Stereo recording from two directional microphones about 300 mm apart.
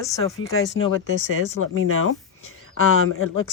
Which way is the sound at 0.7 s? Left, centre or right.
Left.